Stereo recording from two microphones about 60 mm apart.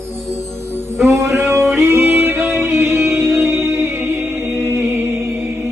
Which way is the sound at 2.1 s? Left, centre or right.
Right.